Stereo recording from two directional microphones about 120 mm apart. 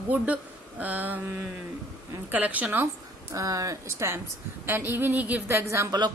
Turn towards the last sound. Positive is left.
turn(degrees=-20)  # may be behind; listen again after turning